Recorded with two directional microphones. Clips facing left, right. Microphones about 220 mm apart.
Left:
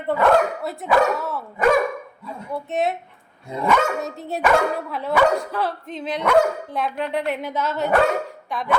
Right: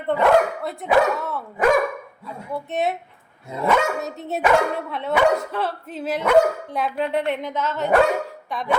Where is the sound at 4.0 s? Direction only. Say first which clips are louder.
Even; centre (ahead or behind).